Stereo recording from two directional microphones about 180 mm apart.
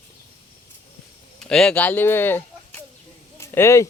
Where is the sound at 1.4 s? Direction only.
5° left (ahead or behind).